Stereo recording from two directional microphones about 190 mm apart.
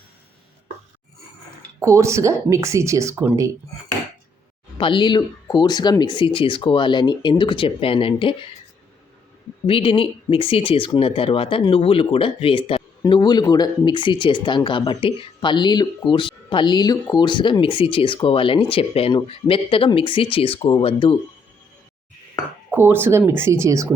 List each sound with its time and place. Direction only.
1.8 s speech: 15° right (ahead or behind)
4.8 s speech: 25° left (ahead or behind)
9.6 s speech: 30° left (ahead or behind)
22.7 s speech: 10° right (ahead or behind)